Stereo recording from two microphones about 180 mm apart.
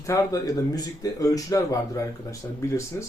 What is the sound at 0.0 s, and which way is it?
Speech, 20° left (ahead or behind).